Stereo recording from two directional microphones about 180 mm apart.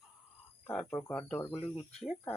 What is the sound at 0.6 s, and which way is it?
Speech, 10° left (ahead or behind).